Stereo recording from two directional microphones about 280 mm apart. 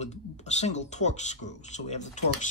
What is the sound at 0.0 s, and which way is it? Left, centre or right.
Speech, left.